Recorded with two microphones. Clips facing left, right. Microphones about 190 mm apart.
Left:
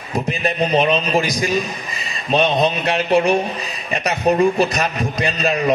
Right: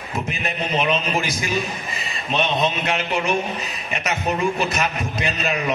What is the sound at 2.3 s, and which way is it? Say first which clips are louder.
A man's voice: left 5 dB; 35° left (ahead or behind).